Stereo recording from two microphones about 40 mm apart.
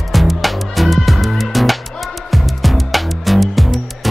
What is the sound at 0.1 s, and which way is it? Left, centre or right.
Music, centre.